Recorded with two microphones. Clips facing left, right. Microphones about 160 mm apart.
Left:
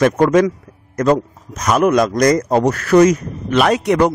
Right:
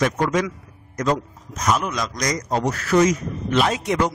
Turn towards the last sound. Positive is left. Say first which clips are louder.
# left 7 dB
turn(degrees=65)  # may be behind; listen again after turning